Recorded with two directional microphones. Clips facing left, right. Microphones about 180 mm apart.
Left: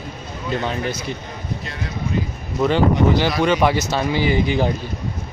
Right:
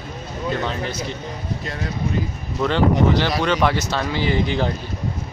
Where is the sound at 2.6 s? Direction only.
10° left (ahead or behind).